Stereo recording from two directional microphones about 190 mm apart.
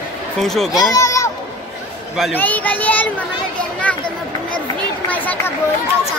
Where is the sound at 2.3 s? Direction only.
10° left (ahead or behind).